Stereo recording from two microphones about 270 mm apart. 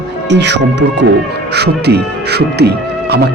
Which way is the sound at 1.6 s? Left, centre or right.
Right.